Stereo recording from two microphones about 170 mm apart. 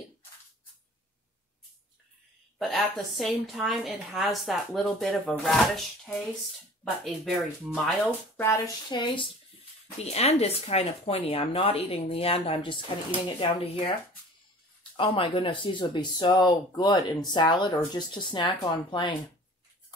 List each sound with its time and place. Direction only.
2.6 s a woman's voice: centre (ahead or behind)
8.4 s hands: 15° left (ahead or behind)
8.9 s speech: 30° left (ahead or behind)